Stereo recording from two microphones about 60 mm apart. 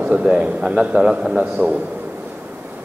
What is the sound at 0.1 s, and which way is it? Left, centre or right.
A man's voice, centre.